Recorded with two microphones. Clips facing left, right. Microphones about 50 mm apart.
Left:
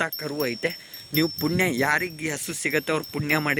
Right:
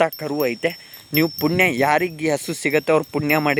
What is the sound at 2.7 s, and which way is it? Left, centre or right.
Speech, right.